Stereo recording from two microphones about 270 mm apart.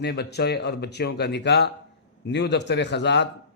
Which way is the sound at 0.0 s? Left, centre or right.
Left.